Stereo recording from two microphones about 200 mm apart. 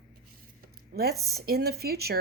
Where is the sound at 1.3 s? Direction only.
55° right (ahead or behind).